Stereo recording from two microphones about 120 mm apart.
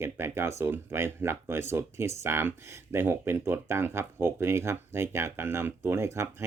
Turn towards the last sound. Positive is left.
turn(degrees=-20)  # may be behind; listen again after turning